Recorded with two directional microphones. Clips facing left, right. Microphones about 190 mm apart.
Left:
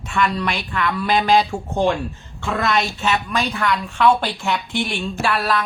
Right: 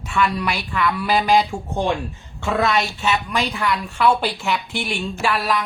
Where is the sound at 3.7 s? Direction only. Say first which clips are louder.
Left 2 dB; centre (ahead or behind).